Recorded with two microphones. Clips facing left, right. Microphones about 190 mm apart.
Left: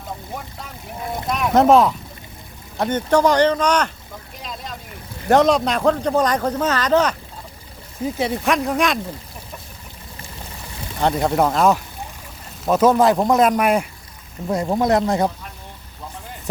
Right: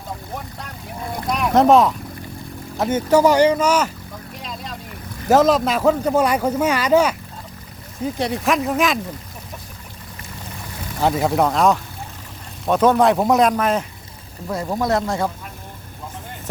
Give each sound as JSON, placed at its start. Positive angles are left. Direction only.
{"t": 1.3, "sound": "a man's voice", "side_deg": 0}
{"t": 4.4, "sound": "vehicle", "side_deg": 0}
{"t": 5.3, "sound": "a man's voice", "side_deg": 0}
{"t": 11.0, "sound": "speech", "side_deg": 0}
{"t": 13.5, "sound": "speech", "side_deg": 10}